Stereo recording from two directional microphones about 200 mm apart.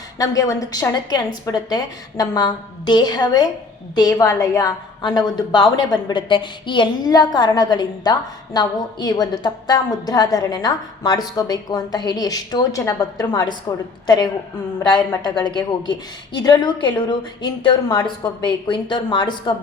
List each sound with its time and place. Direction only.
0.2 s a woman's voice: 15° left (ahead or behind)
14.8 s a woman's voice: 20° left (ahead or behind)